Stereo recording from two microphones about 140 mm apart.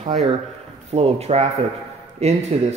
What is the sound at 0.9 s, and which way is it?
Speech, 50° right (ahead or behind).